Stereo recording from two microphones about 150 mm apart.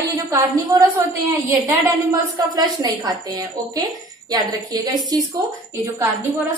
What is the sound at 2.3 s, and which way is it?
A woman's voice, 25° right (ahead or behind).